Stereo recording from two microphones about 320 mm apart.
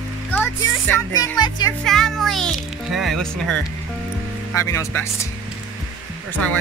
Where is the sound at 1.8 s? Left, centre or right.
Centre.